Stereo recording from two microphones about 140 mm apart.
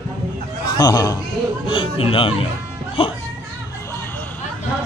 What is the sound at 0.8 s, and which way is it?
Speech, 25° left (ahead or behind).